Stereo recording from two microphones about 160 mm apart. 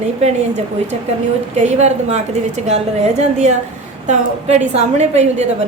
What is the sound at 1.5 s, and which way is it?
A woman's voice, 45° right (ahead or behind).